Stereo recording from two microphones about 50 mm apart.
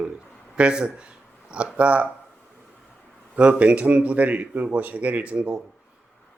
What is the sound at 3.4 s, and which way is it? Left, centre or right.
A man's voice, right.